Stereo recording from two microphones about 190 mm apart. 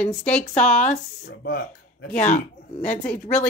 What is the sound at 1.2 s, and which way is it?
Speech, 55° left (ahead or behind).